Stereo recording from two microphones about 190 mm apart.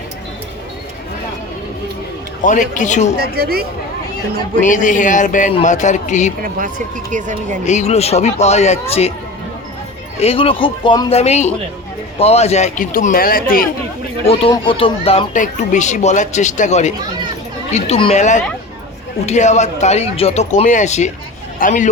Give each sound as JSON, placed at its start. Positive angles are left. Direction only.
{"t": 2.4, "sound": "speech", "side_deg": 40}
{"t": 3.2, "sound": "a woman's voice", "side_deg": -55}
{"t": 4.6, "sound": "speech", "side_deg": 40}
{"t": 6.4, "sound": "speech", "side_deg": -45}
{"t": 7.6, "sound": "speech", "side_deg": 35}
{"t": 10.2, "sound": "a man's voice", "side_deg": 30}
{"t": 14.3, "sound": "a man's voice", "side_deg": 30}